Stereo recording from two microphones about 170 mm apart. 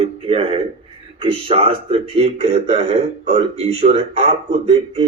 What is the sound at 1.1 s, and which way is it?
Speech, 35° right (ahead or behind).